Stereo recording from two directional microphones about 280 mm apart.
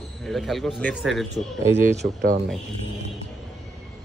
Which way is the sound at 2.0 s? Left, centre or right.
Right.